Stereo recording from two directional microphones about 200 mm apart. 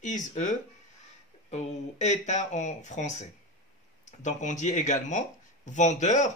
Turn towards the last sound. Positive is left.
turn(degrees=35)  # may be behind; listen again after turning